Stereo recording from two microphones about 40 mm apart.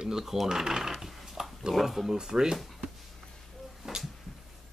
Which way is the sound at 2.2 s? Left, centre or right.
Centre.